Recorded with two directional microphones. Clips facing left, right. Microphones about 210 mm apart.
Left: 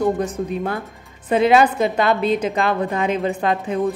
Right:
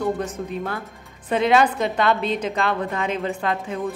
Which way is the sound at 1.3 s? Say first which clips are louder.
Left 3 dB; 10° left (ahead or behind).